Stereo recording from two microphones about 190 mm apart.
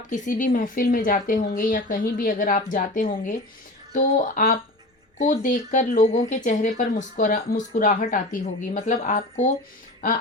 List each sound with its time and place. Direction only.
0.1 s speech: 45° left (ahead or behind)